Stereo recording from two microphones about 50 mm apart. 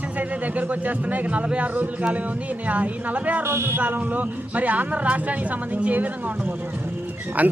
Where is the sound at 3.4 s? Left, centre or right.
Right.